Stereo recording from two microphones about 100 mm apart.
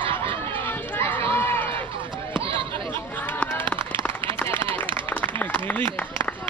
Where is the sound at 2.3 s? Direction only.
65° right (ahead or behind).